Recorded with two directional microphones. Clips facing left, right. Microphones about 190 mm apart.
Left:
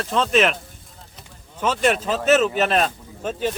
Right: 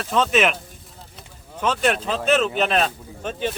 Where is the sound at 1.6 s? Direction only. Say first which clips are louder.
Left 1 dB; 5° left (ahead or behind).